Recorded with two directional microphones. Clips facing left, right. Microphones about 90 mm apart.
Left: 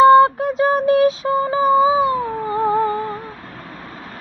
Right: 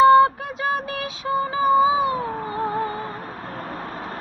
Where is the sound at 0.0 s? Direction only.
30° left (ahead or behind).